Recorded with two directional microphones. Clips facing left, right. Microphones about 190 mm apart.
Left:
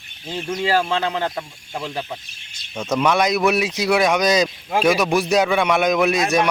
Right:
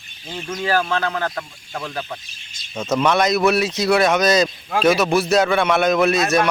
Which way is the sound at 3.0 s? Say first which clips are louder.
Right 1 dB; 10° left (ahead or behind).